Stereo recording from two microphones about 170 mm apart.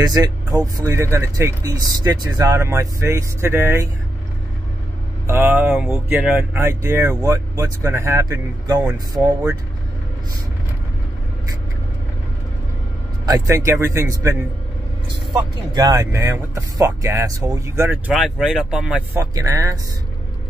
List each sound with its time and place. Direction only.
0.0 s speech: 20° right (ahead or behind)
5.2 s speech: 15° right (ahead or behind)
13.2 s speech: 20° right (ahead or behind)
18.1 s speech: 5° right (ahead or behind)
19.3 s speech: 20° right (ahead or behind)